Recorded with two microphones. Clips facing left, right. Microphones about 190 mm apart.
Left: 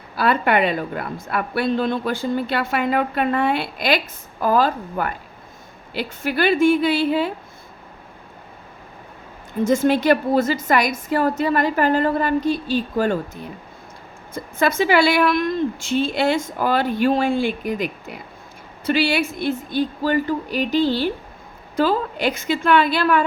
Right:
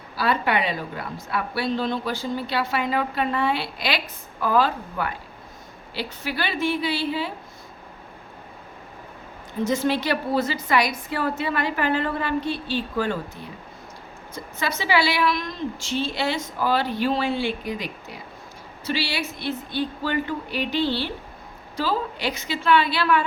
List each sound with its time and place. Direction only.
0.2 s a woman's voice: 55° left (ahead or behind)
9.6 s a woman's voice: 50° left (ahead or behind)